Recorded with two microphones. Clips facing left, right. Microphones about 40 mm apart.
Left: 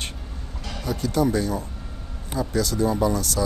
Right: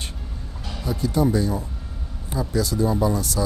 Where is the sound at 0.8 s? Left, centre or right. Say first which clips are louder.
Right 1 dB; left.